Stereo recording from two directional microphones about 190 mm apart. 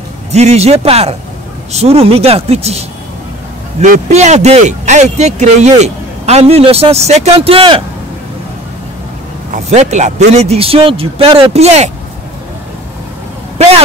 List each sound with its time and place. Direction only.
0.3 s speech: 35° right (ahead or behind)
3.8 s speech: 35° right (ahead or behind)
9.5 s speech: 35° right (ahead or behind)